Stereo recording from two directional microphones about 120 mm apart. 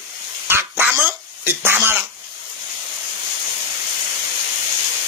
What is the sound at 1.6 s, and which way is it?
Speech, 15° right (ahead or behind).